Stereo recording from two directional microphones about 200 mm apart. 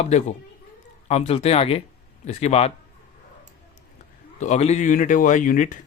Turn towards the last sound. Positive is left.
turn(degrees=40)  # may be behind; listen again after turning